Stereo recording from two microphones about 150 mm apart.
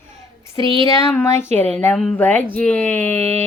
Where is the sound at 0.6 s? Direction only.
35° right (ahead or behind).